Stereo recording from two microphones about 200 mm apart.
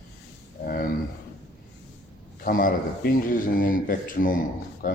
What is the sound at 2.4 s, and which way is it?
A man's voice, 45° left (ahead or behind).